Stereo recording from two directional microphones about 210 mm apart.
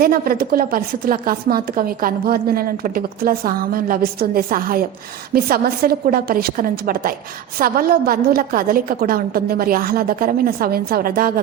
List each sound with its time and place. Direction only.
0.0 s speech: 45° right (ahead or behind)